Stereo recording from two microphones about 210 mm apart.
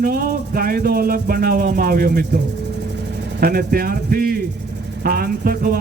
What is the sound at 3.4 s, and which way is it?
Speech, 45° right (ahead or behind).